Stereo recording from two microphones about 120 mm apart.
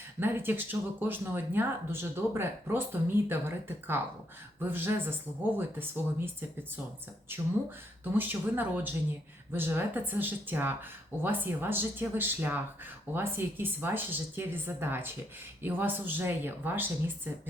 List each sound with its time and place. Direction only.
0.2 s a woman's voice: 20° right (ahead or behind)
8.1 s a woman's voice: 15° right (ahead or behind)